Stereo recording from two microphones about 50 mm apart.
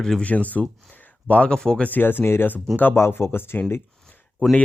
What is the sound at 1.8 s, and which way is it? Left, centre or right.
Speech, left.